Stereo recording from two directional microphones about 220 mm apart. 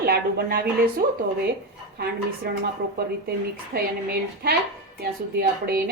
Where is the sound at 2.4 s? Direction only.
45° right (ahead or behind).